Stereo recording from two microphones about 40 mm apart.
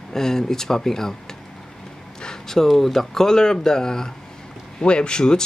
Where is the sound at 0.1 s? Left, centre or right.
Centre.